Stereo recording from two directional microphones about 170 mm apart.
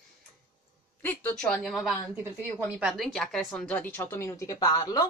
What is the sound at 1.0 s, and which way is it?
Speech, 10° left (ahead or behind).